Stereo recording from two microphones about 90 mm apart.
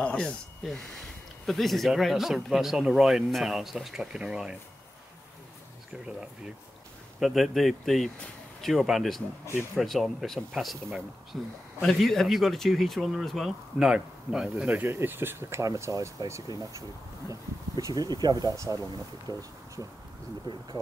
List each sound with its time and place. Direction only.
0.0 s speech: 10° left (ahead or behind)
0.6 s speech: centre (ahead or behind)
7.2 s speech: centre (ahead or behind)
11.8 s speech: 5° left (ahead or behind)
14.7 s speech: 25° right (ahead or behind)
15.6 s speech: 40° right (ahead or behind)